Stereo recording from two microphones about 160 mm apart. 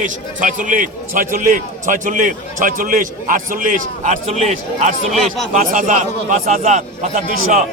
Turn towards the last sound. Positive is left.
turn(degrees=-55)  # may be behind; listen again after turning